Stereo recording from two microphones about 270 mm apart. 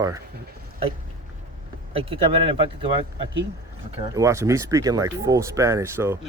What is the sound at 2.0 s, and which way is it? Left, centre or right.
Speech, centre.